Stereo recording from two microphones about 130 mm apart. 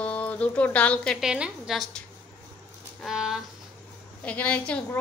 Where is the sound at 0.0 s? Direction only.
10° left (ahead or behind).